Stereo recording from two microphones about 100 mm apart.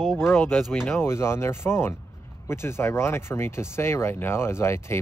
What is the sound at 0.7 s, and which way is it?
Speech, 25° left (ahead or behind).